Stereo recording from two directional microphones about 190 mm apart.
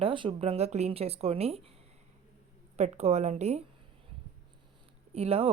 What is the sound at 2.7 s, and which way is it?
Speech, 35° right (ahead or behind).